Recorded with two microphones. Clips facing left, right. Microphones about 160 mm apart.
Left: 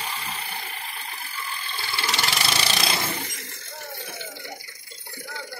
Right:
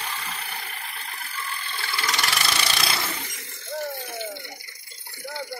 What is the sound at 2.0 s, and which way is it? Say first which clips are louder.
Wood: even; 30° left (ahead or behind).